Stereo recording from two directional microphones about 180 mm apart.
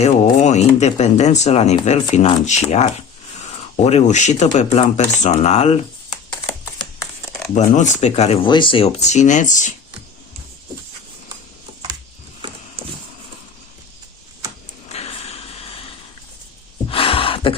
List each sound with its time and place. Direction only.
0.0 s speech: 35° left (ahead or behind)
7.5 s speech: 45° left (ahead or behind)
14.9 s music: 35° left (ahead or behind)
16.9 s a sound: 30° left (ahead or behind)